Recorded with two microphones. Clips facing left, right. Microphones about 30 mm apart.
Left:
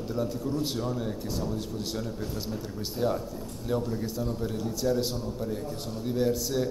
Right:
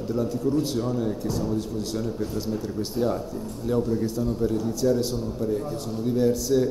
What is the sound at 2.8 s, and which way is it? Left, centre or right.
A man's voice, centre.